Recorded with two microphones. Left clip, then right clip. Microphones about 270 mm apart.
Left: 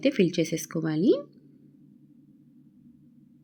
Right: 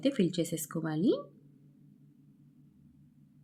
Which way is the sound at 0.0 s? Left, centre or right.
Centre.